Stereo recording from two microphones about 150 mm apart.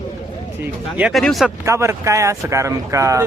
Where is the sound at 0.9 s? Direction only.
5° right (ahead or behind).